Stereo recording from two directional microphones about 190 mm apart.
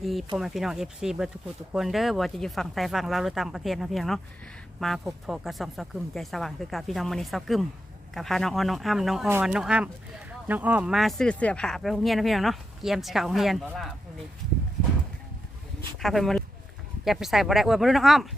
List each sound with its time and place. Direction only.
0.0 s speech: centre (ahead or behind)
16.0 s speech: centre (ahead or behind)